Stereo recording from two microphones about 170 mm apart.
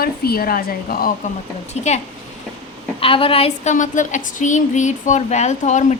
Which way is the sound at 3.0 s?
30° left (ahead or behind).